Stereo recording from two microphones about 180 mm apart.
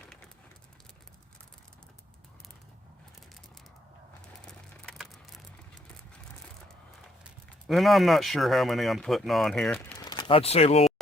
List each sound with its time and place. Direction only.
4.9 s a sound: centre (ahead or behind)
7.3 s speech: centre (ahead or behind)
10.0 s speech: 25° left (ahead or behind)